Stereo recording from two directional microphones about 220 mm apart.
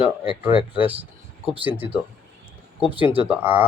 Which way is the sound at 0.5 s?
20° left (ahead or behind).